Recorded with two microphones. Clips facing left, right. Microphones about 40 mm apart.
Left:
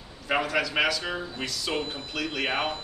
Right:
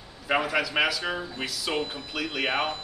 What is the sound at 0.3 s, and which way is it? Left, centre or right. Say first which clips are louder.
Speech: right 1 dB; centre.